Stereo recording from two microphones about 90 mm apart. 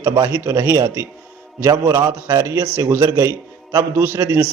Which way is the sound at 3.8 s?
25° right (ahead or behind).